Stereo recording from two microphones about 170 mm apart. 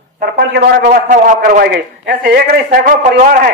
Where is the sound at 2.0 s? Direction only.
65° right (ahead or behind).